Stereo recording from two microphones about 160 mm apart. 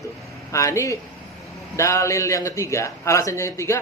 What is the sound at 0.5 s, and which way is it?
Speech, 20° left (ahead or behind).